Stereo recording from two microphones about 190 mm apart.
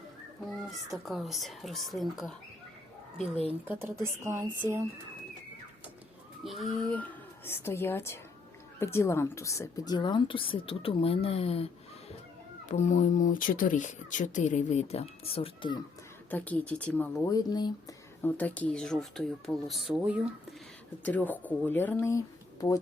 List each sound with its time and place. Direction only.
0.9 s speech: centre (ahead or behind)
3.2 s speech: 35° left (ahead or behind)
3.7 s speech: 10° right (ahead or behind)
6.4 s speech: centre (ahead or behind); by 15.8 s 25° left (ahead or behind)
16.3 s speech: 10° left (ahead or behind)
17.3 s speech: 20° left (ahead or behind)
18.2 s speech: 10° left (ahead or behind)
21.0 s speech: 10° left (ahead or behind)